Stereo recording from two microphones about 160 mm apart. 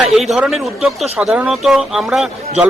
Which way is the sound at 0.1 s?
Centre (ahead or behind).